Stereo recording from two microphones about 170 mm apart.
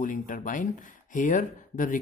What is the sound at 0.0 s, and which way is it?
Speech, 50° left (ahead or behind).